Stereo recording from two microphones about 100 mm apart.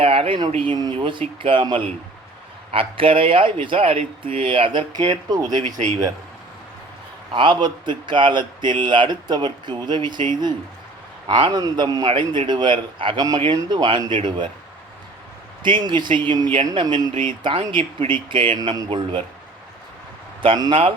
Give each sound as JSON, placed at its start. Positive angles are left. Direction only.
{"t": 0.0, "sound": "speech", "side_deg": -75}
{"t": 4.9, "sound": "speech", "side_deg": -45}
{"t": 7.3, "sound": "speech", "side_deg": -50}
{"t": 11.3, "sound": "speech", "side_deg": -50}
{"t": 11.6, "sound": "a man's voice", "side_deg": -40}
{"t": 12.0, "sound": "speech", "side_deg": -55}
{"t": 13.1, "sound": "a man's voice", "side_deg": -40}
{"t": 15.6, "sound": "speech", "side_deg": -50}
{"t": 20.6, "sound": "speech", "side_deg": -60}